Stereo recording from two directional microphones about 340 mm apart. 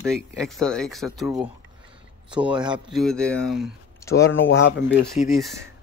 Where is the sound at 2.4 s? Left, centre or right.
Centre.